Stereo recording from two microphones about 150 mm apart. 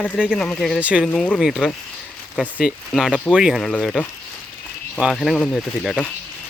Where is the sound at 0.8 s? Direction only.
10° right (ahead or behind).